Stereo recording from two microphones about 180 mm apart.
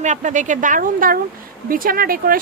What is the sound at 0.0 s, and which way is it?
Speech, 40° right (ahead or behind).